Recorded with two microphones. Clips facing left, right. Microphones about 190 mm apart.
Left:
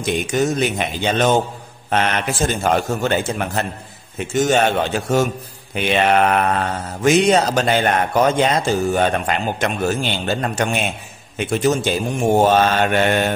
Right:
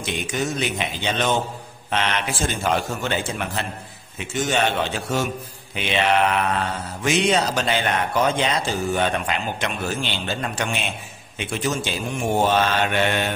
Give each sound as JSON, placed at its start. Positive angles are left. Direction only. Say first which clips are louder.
{"t": 0.0, "sound": "mantra", "louder": "left 7 dB", "side_deg": 45}